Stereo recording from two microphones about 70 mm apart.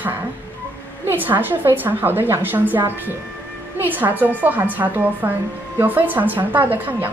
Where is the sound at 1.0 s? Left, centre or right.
Right.